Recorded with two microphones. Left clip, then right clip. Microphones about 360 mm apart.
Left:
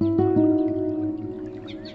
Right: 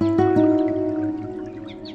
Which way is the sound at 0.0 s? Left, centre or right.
Right.